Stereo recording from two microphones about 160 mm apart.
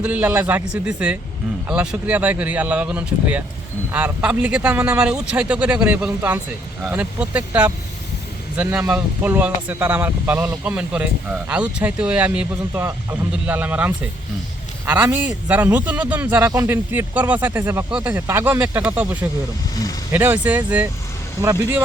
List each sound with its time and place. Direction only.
0.0 s speech: 10° right (ahead or behind)
19.7 s speech: 25° left (ahead or behind)
20.1 s speech: 10° right (ahead or behind)